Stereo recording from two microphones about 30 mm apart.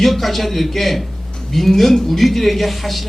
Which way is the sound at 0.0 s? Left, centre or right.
Centre.